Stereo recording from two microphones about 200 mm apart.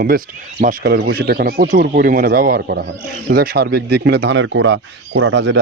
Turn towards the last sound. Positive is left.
turn(degrees=-65)  # may be behind; listen again after turning